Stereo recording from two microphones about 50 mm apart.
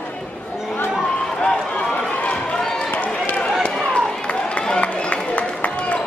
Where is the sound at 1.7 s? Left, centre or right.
Left.